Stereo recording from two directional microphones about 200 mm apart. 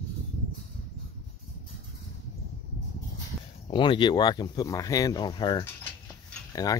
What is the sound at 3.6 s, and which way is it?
Speech, 25° left (ahead or behind).